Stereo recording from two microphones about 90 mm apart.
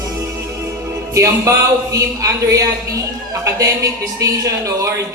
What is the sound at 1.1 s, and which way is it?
Speech, 35° right (ahead or behind).